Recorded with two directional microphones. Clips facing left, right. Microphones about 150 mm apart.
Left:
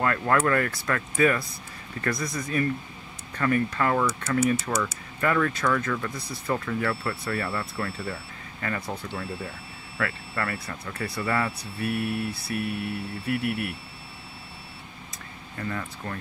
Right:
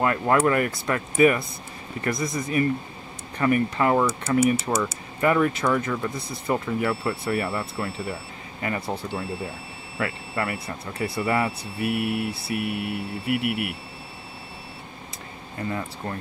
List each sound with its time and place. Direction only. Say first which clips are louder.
0.0 s speech: right 3 dB; 20° right (ahead or behind)
15.5 s speech: right 3 dB; 25° right (ahead or behind)